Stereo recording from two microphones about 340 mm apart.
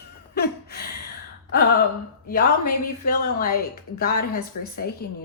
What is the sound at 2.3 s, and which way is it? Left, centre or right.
A woman's voice, left.